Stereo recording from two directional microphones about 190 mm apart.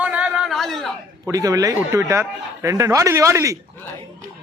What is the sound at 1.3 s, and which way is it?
A man's voice, 20° right (ahead or behind).